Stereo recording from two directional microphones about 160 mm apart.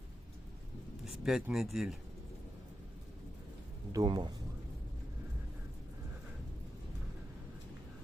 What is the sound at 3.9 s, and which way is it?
Speech, 25° right (ahead or behind).